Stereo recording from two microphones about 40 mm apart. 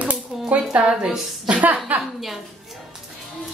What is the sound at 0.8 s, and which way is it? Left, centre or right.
Speech, right.